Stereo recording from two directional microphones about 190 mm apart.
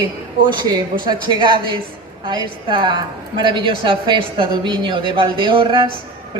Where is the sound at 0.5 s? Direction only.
25° right (ahead or behind).